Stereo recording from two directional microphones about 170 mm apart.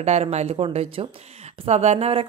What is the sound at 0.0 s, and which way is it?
Speech, 40° right (ahead or behind).